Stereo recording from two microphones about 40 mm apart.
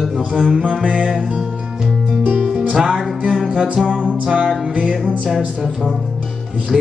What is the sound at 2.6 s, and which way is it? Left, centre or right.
Music, centre.